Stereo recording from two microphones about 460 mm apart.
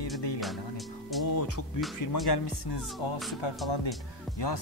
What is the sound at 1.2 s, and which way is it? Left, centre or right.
Speech, left.